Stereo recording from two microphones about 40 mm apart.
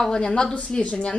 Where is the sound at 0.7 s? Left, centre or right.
Left.